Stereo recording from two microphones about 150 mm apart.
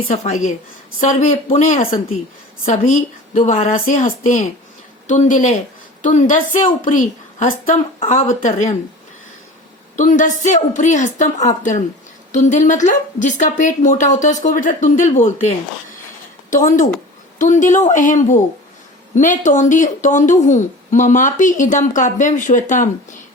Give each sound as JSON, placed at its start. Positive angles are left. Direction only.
{"t": 0.1, "sound": "a woman's voice", "side_deg": 50}
{"t": 7.9, "sound": "speech", "side_deg": 40}
{"t": 10.0, "sound": "speech", "side_deg": 55}